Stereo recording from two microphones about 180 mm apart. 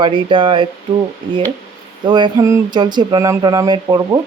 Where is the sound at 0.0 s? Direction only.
25° right (ahead or behind).